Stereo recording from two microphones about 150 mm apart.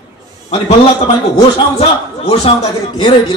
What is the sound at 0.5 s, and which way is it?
A man's voice, 45° left (ahead or behind).